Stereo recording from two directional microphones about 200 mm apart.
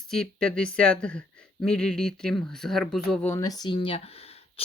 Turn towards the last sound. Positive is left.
turn(degrees=25)  # may be behind; listen again after turning